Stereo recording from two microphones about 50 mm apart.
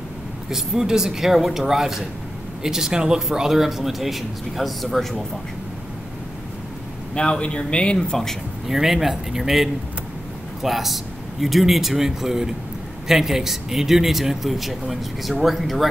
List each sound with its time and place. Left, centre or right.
0.5 s speech: centre
7.2 s speech: centre
8.6 s speech: centre